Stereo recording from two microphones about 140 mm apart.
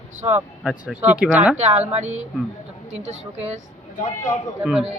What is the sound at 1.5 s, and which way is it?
Speech, 50° right (ahead or behind).